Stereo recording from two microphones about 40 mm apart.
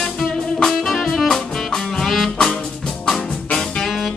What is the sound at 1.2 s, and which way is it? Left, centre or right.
Music, centre.